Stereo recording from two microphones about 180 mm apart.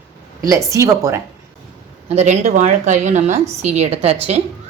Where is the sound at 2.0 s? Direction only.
35° right (ahead or behind).